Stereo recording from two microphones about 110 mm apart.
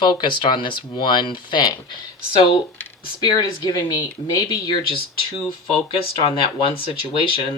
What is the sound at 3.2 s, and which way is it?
Speech, 40° left (ahead or behind).